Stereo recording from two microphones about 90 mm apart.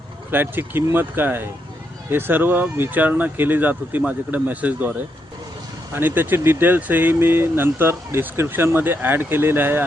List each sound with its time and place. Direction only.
0.3 s speech: 20° right (ahead or behind)